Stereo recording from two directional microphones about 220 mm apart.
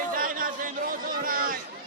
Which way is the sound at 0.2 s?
40° right (ahead or behind).